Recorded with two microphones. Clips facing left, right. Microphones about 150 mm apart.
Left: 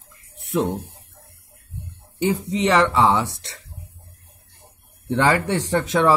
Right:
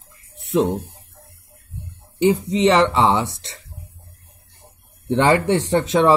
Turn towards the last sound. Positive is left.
turn(degrees=-25)  # may be behind; listen again after turning